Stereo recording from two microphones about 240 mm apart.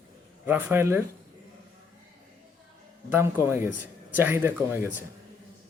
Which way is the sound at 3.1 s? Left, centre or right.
Centre.